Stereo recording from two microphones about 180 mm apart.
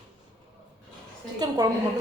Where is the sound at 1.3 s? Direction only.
20° right (ahead or behind).